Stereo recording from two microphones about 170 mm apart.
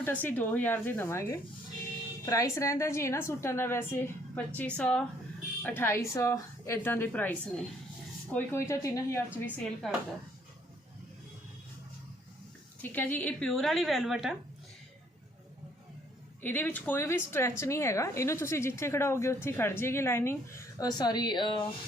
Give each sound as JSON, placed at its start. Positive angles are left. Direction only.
{"t": 0.0, "sound": "a woman's voice", "side_deg": 10}
{"t": 9.3, "sound": "a woman's voice", "side_deg": 0}
{"t": 12.8, "sound": "a woman's voice", "side_deg": 10}
{"t": 16.4, "sound": "a woman's voice", "side_deg": 10}